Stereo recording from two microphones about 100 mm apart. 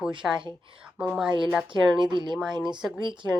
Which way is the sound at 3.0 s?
50° right (ahead or behind).